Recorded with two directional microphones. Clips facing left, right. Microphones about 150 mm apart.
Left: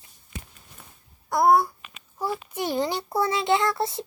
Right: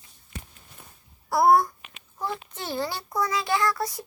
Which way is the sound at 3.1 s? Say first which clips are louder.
Left 3 dB; 25° left (ahead or behind).